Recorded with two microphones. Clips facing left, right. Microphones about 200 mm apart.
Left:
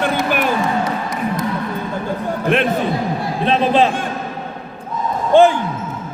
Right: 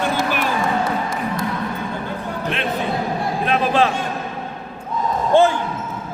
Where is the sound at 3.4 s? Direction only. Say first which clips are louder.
Left 4 dB; 25° left (ahead or behind).